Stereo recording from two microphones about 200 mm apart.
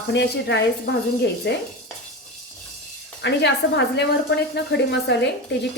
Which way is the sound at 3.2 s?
60° left (ahead or behind).